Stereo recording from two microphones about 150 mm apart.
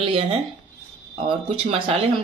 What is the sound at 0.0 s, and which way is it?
Speech, 35° right (ahead or behind).